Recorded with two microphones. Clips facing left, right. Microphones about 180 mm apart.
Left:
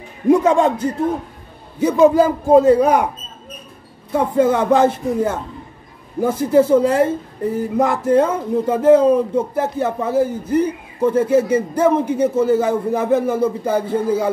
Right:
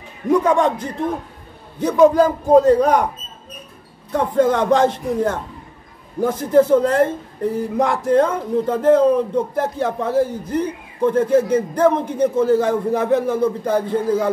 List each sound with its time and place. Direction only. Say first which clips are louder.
0.3 s a man's voice: left 3 dB; 25° left (ahead or behind)
0.7 s speech: left 3 dB; 5° left (ahead or behind)
4.1 s a man's voice: left 1 dB; 5° left (ahead or behind)